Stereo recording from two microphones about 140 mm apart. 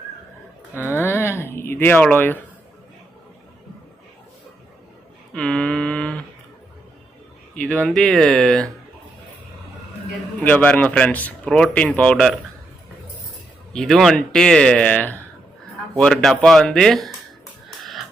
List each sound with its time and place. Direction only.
0.9 s speech: 15° left (ahead or behind)
5.3 s a sound: 5° left (ahead or behind)
7.5 s speech: 10° left (ahead or behind)
10.4 s speech: 10° left (ahead or behind)
13.7 s speech: centre (ahead or behind)